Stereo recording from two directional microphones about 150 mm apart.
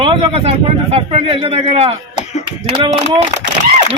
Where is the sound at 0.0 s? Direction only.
40° right (ahead or behind).